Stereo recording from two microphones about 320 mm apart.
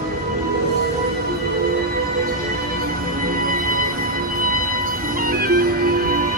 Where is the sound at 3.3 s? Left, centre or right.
Right.